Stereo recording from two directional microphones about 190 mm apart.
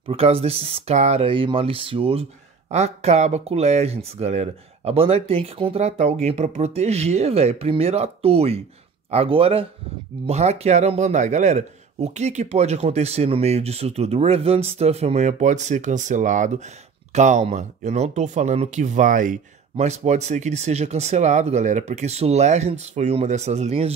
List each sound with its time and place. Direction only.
0.1 s speech: 30° right (ahead or behind)